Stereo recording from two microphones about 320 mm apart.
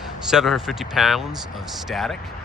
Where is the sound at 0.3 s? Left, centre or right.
Centre.